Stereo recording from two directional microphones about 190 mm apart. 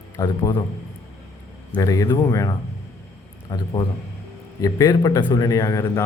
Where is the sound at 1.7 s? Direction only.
20° left (ahead or behind).